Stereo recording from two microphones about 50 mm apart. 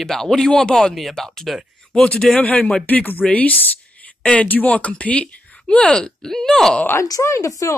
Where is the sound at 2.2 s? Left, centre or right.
Left.